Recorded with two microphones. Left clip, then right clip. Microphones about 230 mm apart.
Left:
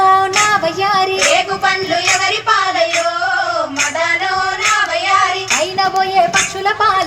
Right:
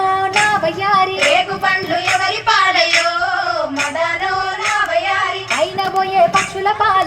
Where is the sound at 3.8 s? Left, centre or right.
Left.